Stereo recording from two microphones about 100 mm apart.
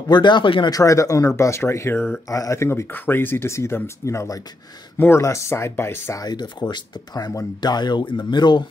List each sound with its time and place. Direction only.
0.1 s speech: 50° left (ahead or behind)
0.7 s speech: 35° left (ahead or behind)
2.2 s speech: 35° left (ahead or behind)
6.2 s speech: 45° left (ahead or behind)